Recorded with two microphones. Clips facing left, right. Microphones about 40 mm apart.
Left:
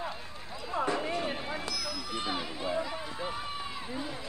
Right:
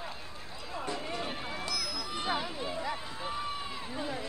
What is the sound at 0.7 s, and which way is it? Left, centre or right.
Speech, left.